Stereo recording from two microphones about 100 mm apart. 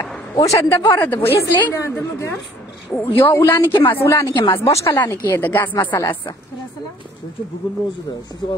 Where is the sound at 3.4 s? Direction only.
25° left (ahead or behind); by 4.6 s 40° left (ahead or behind).